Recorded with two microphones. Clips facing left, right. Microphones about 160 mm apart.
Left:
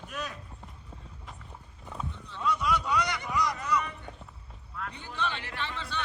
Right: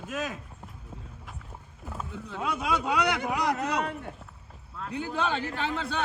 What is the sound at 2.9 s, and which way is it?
Speech, 65° right (ahead or behind).